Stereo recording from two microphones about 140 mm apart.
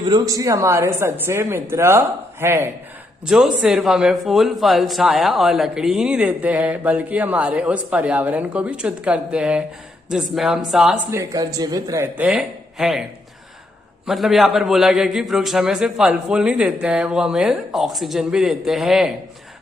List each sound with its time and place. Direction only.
0.0 s a woman's voice: 25° right (ahead or behind)
3.2 s a man's voice: 5° right (ahead or behind)
11.1 s speech: 25° right (ahead or behind); by 13.1 s 5° right (ahead or behind)
14.1 s a man's voice: centre (ahead or behind)